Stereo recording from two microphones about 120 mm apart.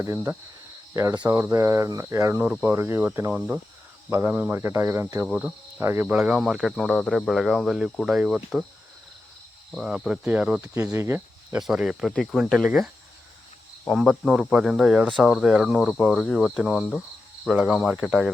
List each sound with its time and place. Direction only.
0.0 s speech: 20° right (ahead or behind)
1.1 s speech: 10° right (ahead or behind)
1.4 s speech: 20° right (ahead or behind); by 8.6 s 5° right (ahead or behind)
9.7 s speech: 5° right (ahead or behind)
10.9 s speech: 20° right (ahead or behind)
11.5 s speech: 5° right (ahead or behind)